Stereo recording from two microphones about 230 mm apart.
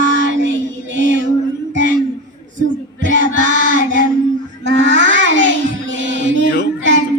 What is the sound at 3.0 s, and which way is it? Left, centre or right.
Child singing, right.